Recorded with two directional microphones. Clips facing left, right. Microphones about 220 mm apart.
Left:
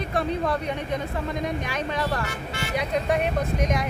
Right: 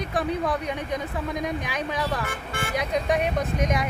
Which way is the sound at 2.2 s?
50° right (ahead or behind).